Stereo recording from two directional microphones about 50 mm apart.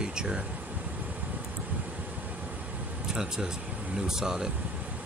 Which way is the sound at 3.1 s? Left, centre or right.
Centre.